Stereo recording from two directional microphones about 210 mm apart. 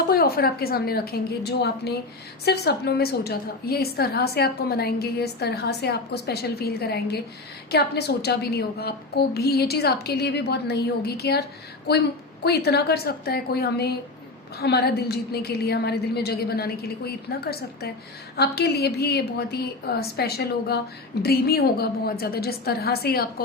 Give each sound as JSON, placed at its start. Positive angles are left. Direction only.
{"t": 0.1, "sound": "a woman's voice", "side_deg": 45}